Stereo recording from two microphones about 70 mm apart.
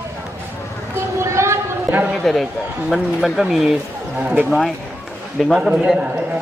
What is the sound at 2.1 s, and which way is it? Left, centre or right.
A man's voice, centre.